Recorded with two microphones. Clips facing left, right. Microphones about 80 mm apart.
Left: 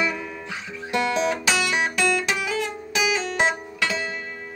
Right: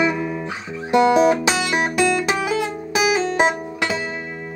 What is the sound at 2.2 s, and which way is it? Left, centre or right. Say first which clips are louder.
Music: right 5 dB; right.